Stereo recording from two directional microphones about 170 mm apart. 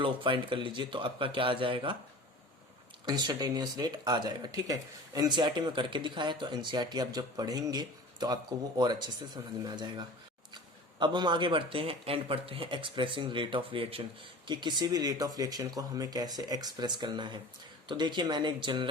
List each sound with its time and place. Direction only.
0.0 s speech: 30° right (ahead or behind)
3.1 s speech: 25° right (ahead or behind)